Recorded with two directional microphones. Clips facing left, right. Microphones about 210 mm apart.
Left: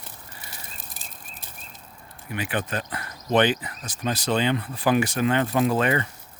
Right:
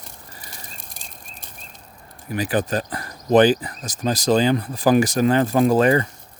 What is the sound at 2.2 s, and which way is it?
Speech, 40° right (ahead or behind).